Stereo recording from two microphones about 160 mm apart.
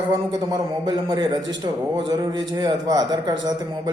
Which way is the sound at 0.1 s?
25° right (ahead or behind).